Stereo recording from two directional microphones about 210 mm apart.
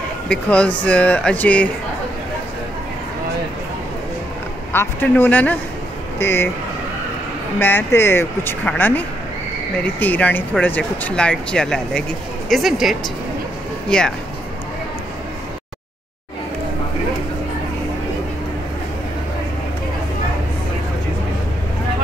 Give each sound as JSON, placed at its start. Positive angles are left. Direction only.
{"t": 0.3, "sound": "speech", "side_deg": 5}
{"t": 4.7, "sound": "speech", "side_deg": 10}
{"t": 7.5, "sound": "speech", "side_deg": 10}